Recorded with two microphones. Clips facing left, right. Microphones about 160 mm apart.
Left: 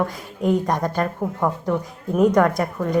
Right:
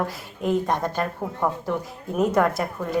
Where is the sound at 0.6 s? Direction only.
45° left (ahead or behind).